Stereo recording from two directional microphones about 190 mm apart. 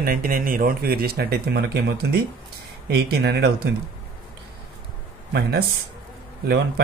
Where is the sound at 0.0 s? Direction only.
50° right (ahead or behind).